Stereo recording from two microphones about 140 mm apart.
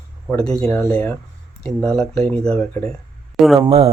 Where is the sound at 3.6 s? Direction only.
40° right (ahead or behind).